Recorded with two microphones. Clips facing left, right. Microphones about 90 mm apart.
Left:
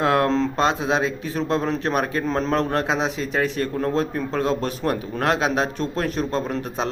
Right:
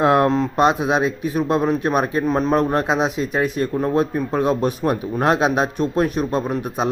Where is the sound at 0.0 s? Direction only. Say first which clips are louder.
Right 4 dB; 20° right (ahead or behind).